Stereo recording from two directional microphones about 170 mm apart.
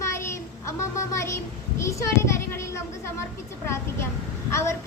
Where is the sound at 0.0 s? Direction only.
15° left (ahead or behind).